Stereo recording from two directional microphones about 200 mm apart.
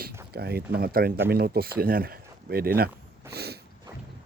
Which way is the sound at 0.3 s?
50° right (ahead or behind).